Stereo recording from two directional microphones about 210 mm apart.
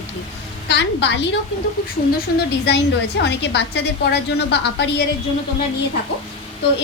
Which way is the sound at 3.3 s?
55° left (ahead or behind).